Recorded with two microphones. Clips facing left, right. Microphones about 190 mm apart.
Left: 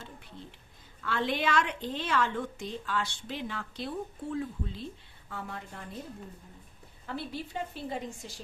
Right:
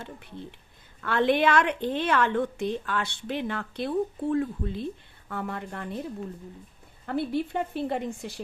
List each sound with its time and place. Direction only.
0.0 s a woman's voice: 60° right (ahead or behind)
7.0 s a woman's voice: 55° right (ahead or behind)